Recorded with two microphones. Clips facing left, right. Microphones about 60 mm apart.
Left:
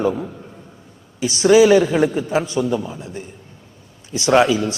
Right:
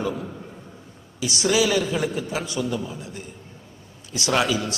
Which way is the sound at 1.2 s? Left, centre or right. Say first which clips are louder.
Left 9 dB; left.